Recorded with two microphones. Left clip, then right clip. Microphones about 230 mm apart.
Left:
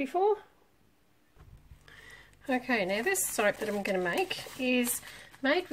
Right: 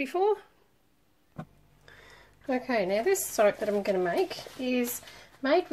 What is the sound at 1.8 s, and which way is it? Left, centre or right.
A woman's voice, left.